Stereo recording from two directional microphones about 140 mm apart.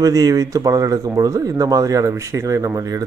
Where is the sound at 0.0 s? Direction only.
25° right (ahead or behind).